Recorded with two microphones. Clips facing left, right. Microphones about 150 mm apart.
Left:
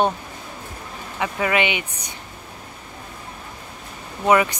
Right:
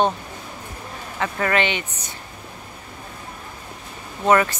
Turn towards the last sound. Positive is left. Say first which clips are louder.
# even
turn(degrees=10)  # may be behind; listen again after turning